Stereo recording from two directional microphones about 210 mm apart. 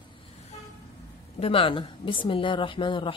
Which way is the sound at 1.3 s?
25° left (ahead or behind).